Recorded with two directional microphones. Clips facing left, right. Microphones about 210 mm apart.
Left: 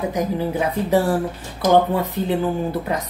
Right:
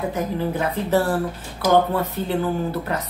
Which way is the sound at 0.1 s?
15° left (ahead or behind).